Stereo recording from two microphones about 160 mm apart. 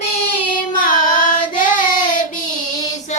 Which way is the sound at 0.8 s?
55° left (ahead or behind).